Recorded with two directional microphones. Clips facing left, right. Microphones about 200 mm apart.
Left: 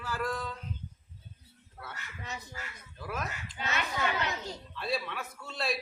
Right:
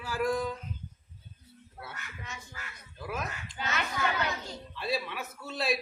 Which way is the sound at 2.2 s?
35° left (ahead or behind).